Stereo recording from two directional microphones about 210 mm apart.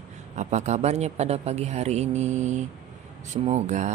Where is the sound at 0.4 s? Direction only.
35° right (ahead or behind).